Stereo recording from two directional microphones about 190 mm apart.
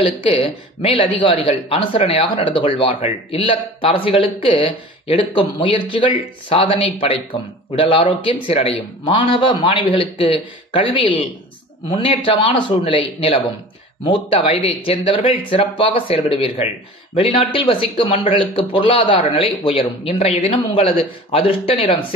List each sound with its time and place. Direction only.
0.0 s speech: 30° left (ahead or behind)